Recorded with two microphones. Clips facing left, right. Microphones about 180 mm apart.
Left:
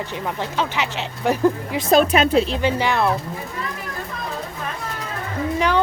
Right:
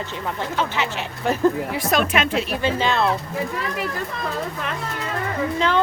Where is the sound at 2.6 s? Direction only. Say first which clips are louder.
Left 1 dB; 15° left (ahead or behind).